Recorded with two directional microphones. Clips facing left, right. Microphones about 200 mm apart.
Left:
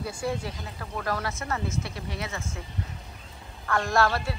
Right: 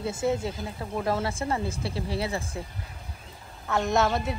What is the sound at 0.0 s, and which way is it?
Speech, 25° right (ahead or behind).